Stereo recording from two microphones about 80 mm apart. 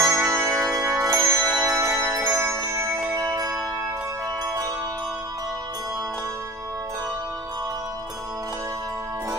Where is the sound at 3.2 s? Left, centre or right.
Right.